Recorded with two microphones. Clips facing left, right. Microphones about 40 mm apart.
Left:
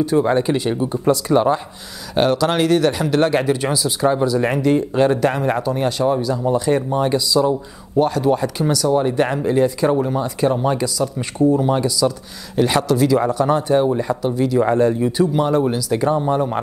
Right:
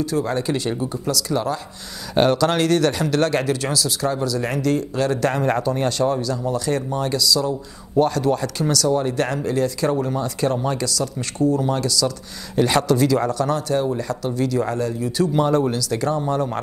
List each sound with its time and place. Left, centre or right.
0.0 s speech: left
1.0 s speech: left
2.1 s speech: centre; by 5.2 s left
5.2 s speech: centre
7.9 s speech: centre
12.5 s speech: centre
14.7 s speech: left
15.3 s speech: centre